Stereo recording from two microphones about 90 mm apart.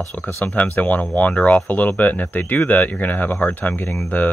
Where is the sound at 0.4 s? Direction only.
20° left (ahead or behind).